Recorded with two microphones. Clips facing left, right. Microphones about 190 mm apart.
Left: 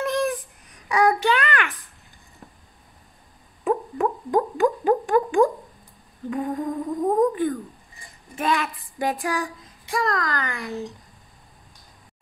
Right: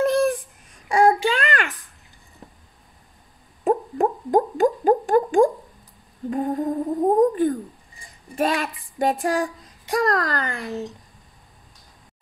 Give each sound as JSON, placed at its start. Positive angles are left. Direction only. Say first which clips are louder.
{"t": 0.7, "sound": "babbling", "louder": "right 3 dB", "side_deg": -30}
{"t": 3.6, "sound": "a sound", "louder": "right 2 dB", "side_deg": -45}
{"t": 6.3, "sound": "humming", "louder": "right 3 dB", "side_deg": -40}
{"t": 6.7, "sound": "music", "louder": "right 3 dB", "side_deg": -30}
{"t": 8.4, "sound": "a sound", "louder": "right 2 dB", "side_deg": -30}
{"t": 9.2, "sound": "a child's voice", "louder": "right 4 dB", "side_deg": -40}